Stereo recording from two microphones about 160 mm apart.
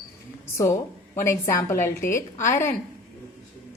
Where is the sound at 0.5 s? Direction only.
20° left (ahead or behind).